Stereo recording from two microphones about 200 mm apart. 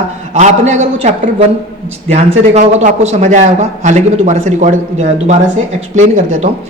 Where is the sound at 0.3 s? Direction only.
35° right (ahead or behind).